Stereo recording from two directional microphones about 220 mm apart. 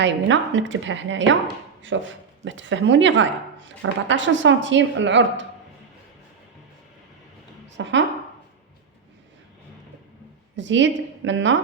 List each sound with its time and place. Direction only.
0.0 s a woman's voice: 55° right (ahead or behind)
7.8 s a woman's voice: 55° right (ahead or behind)
10.5 s a woman's voice: 55° right (ahead or behind)